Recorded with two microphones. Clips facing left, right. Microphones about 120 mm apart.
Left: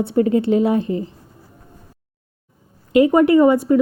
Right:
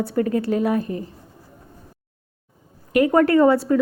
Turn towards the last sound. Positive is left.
turn(degrees=15)  # may be behind; listen again after turning